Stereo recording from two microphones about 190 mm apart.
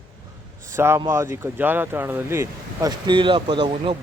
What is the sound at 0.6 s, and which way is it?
Speech, 15° right (ahead or behind).